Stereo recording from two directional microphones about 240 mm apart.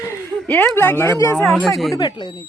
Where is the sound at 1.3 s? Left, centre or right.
Centre.